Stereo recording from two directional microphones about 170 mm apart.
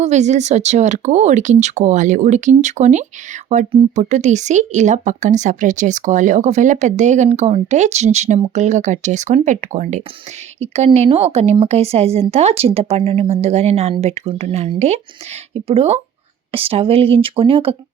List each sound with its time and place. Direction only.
0.0 s speech: 40° right (ahead or behind)